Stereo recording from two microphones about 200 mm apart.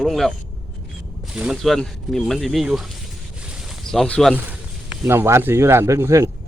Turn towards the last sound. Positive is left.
turn(degrees=-15)  # may be behind; listen again after turning